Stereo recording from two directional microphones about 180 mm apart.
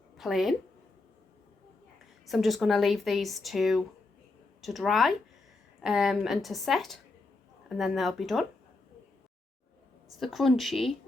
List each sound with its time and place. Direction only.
0.2 s speech: centre (ahead or behind)
2.2 s speech: centre (ahead or behind)
10.2 s speech: centre (ahead or behind)